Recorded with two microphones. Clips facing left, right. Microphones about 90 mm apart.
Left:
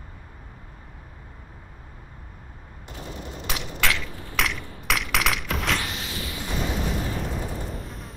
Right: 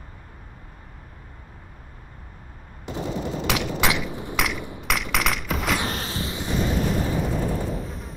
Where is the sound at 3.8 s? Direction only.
20° right (ahead or behind).